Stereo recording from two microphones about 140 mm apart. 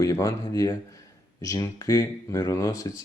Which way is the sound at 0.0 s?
25° left (ahead or behind).